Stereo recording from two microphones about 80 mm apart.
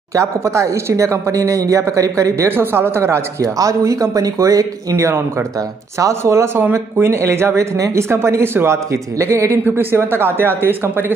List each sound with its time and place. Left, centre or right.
0.1 s speech: right
2.5 s speech: right